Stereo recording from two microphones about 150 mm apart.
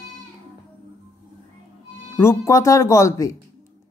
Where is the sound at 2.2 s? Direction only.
20° left (ahead or behind).